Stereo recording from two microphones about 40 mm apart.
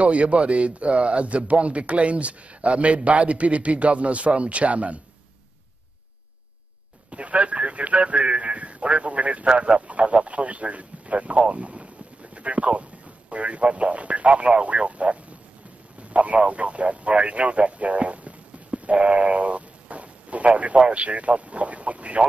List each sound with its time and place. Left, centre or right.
0.0 s a man's voice: right
7.1 s a man's voice: right
11.5 s a sound: right
13.3 s a man's voice: right